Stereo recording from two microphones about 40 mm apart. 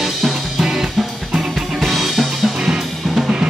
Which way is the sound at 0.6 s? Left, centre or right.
Centre.